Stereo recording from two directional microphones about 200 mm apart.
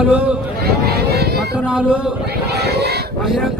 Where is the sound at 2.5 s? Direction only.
55° right (ahead or behind).